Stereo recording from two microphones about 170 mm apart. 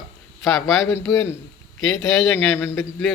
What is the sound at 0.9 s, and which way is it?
Speech, 15° left (ahead or behind).